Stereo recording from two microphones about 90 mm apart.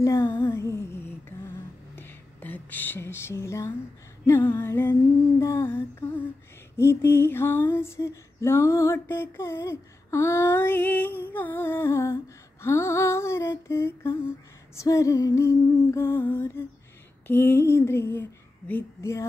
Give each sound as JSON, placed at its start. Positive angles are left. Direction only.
{"t": 0.0, "sound": "humming", "side_deg": 35}
{"t": 0.6, "sound": "music", "side_deg": 30}
{"t": 2.0, "sound": "a sound", "side_deg": 20}
{"t": 4.3, "sound": "female singing", "side_deg": 25}
{"t": 5.4, "sound": "humming", "side_deg": 30}
{"t": 6.8, "sound": "female singing", "side_deg": 30}
{"t": 12.6, "sound": "humming", "side_deg": 30}
{"t": 17.3, "sound": "female singing", "side_deg": 25}
{"t": 18.9, "sound": "humming", "side_deg": 30}